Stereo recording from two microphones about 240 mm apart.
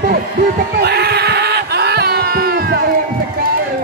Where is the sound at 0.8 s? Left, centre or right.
Right.